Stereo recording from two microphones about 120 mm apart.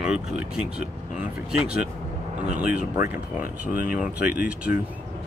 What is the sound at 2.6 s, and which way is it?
Speech, 15° right (ahead or behind).